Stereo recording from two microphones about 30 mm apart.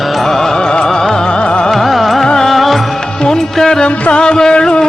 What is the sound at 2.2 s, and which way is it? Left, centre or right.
Music, centre.